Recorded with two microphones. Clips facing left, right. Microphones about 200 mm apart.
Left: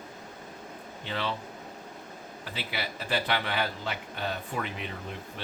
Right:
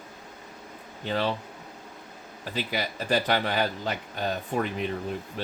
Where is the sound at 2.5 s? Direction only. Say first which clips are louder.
Right 6 dB; 45° right (ahead or behind).